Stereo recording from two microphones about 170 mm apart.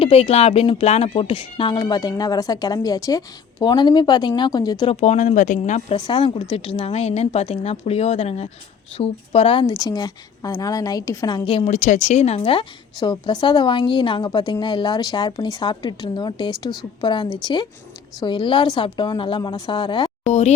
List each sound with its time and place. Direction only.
0.0 s a woman's voice: 35° left (ahead or behind)
4.9 s a woman's voice: 40° left (ahead or behind)
20.2 s speech: 40° left (ahead or behind)